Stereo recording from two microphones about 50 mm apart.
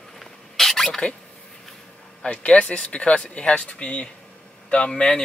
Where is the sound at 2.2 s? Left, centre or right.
Left.